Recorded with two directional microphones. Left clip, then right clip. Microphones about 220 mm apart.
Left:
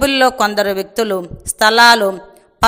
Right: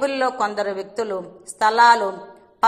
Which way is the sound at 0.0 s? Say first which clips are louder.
Left 8 dB; 50° left (ahead or behind).